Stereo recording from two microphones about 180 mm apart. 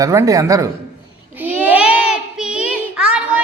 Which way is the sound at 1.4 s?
10° right (ahead or behind).